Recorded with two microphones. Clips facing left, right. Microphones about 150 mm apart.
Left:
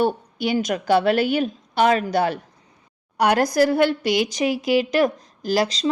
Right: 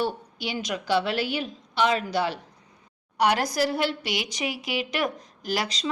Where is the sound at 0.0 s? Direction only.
50° left (ahead or behind).